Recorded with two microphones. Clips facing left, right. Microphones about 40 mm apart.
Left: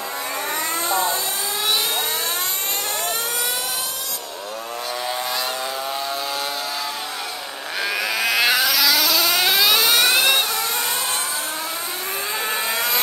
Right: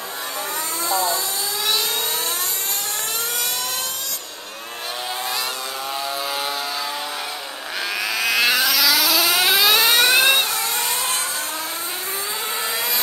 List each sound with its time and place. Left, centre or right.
0.8 s vehicle: left
7.8 s vehicle: centre
9.9 s whir: centre
12.7 s vehicle: left